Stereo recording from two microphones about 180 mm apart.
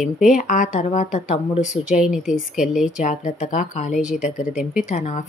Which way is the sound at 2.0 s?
5° right (ahead or behind).